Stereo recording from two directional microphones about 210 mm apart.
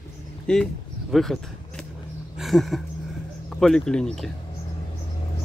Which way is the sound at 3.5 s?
Centre (ahead or behind).